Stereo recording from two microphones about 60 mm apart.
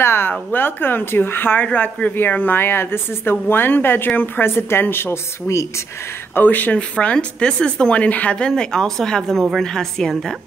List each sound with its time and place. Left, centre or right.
0.0 s a sound: left
0.3 s a woman's voice: left
6.3 s speech: left; by 10.3 s centre